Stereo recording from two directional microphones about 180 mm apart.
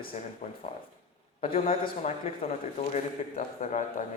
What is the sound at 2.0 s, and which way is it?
A man's voice, 35° left (ahead or behind).